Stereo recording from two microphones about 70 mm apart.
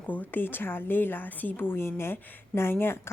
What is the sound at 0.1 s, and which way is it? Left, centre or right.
A woman's voice, left.